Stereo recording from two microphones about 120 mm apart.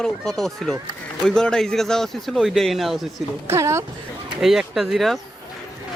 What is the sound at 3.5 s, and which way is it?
Speech, 25° right (ahead or behind).